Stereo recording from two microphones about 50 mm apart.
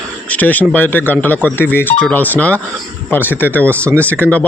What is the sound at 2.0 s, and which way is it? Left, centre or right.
Speech, left.